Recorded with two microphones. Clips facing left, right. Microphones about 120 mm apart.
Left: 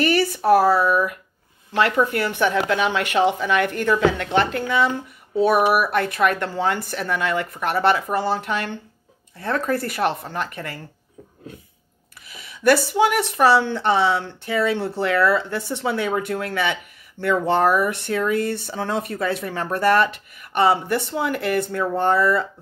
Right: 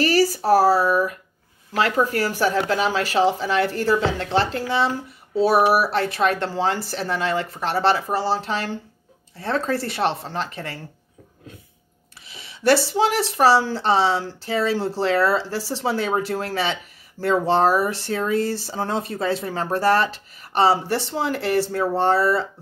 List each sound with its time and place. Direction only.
0.0 s a sound: 35° right (ahead or behind)
0.5 s a woman's voice: 35° right (ahead or behind)
12.3 s speech: 25° right (ahead or behind)